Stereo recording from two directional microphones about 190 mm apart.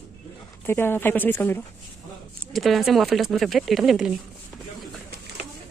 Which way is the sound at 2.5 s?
Centre (ahead or behind).